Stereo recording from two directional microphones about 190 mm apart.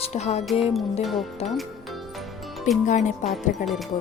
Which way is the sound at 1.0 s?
Centre (ahead or behind).